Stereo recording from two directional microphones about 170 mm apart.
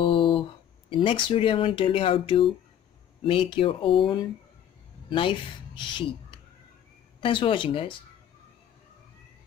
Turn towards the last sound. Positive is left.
turn(degrees=30)  # may be behind; listen again after turning